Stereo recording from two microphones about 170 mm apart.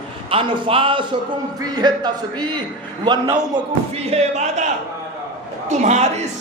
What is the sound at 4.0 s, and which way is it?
Speech, 40° right (ahead or behind).